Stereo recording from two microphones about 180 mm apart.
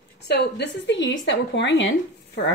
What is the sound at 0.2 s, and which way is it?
A woman's voice, 70° left (ahead or behind).